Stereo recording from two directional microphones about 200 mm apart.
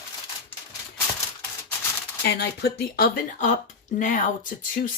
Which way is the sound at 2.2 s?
55° left (ahead or behind).